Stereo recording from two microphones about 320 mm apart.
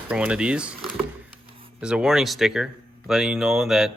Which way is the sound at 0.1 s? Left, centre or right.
Centre.